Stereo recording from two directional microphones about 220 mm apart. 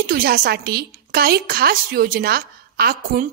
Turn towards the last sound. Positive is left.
turn(degrees=-40)  # may be behind; listen again after turning